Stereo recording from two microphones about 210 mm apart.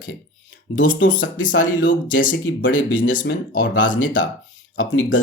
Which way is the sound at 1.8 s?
60° left (ahead or behind).